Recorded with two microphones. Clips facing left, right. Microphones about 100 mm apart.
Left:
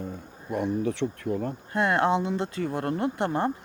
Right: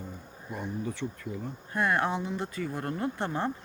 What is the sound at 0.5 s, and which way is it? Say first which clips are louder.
Speech: left 8 dB; 70° left (ahead or behind).